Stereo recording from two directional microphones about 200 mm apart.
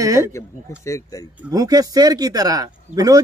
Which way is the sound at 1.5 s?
20° right (ahead or behind).